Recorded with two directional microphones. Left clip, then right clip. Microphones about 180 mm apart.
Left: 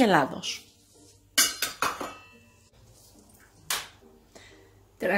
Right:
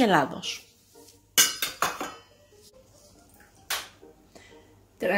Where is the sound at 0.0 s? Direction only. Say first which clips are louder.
Even; centre (ahead or behind).